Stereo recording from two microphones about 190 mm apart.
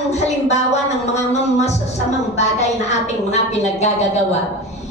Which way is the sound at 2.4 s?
35° left (ahead or behind).